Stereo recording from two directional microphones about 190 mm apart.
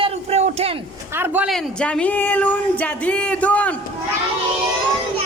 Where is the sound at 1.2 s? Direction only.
10° right (ahead or behind).